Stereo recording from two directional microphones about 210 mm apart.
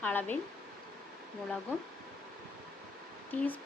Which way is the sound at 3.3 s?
10° left (ahead or behind).